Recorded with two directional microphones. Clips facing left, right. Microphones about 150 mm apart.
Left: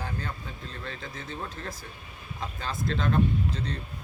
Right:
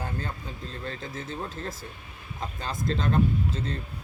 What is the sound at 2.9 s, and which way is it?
Speech, 40° right (ahead or behind).